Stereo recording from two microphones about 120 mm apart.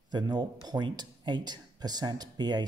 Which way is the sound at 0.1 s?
35° right (ahead or behind).